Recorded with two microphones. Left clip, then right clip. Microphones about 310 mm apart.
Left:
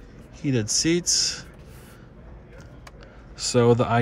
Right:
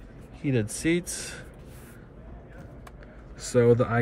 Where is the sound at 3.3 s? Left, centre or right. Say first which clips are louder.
Left 2 dB; centre.